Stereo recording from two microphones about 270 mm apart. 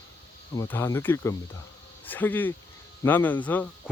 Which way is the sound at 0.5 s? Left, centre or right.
Centre.